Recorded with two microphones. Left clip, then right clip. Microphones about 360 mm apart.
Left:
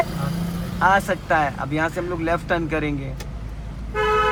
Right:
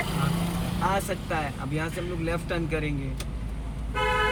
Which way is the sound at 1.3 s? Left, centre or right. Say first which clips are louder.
Left 14 dB; centre.